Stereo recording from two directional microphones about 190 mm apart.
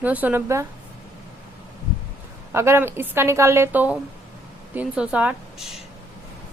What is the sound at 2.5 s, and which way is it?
A woman's voice, 15° right (ahead or behind).